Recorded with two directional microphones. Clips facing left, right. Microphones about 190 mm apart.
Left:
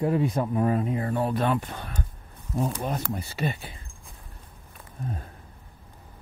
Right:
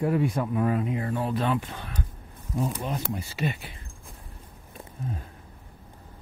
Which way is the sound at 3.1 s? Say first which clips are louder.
Even; 35° left (ahead or behind).